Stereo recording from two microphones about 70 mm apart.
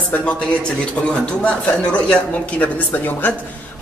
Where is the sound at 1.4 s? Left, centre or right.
Centre.